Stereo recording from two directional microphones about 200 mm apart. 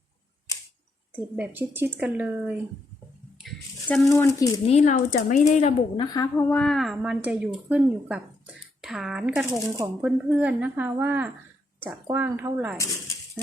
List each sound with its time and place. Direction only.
1.1 s speech: 10° right (ahead or behind)
3.4 s a sound: centre (ahead or behind)
4.1 s speech: 15° left (ahead or behind)
4.6 s speech: 35° left (ahead or behind)
6.0 s a woman's voice: 20° left (ahead or behind)
6.5 s speech: 5° left (ahead or behind)
9.5 s speech: 20° right (ahead or behind)
10.0 s speech: 5° right (ahead or behind)